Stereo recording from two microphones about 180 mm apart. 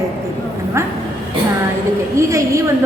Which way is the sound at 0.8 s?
15° right (ahead or behind).